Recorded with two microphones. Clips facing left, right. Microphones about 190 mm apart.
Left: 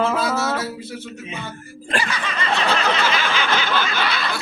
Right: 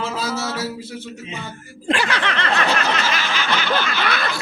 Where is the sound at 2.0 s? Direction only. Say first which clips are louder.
Right 3 dB; 70° right (ahead or behind).